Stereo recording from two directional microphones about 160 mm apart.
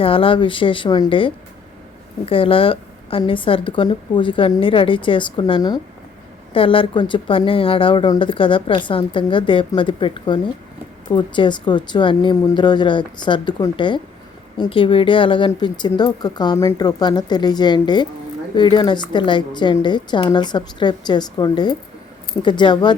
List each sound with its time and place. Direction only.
0.0 s a woman's voice: 35° left (ahead or behind)